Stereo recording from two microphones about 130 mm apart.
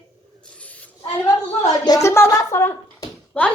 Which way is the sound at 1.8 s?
25° left (ahead or behind).